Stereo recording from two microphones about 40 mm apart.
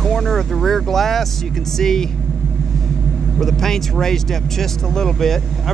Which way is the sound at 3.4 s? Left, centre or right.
Centre.